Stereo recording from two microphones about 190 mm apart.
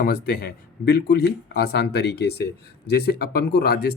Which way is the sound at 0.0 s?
50° left (ahead or behind).